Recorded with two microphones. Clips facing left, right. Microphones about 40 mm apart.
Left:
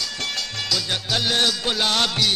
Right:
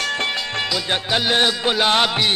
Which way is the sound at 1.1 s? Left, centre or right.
Right.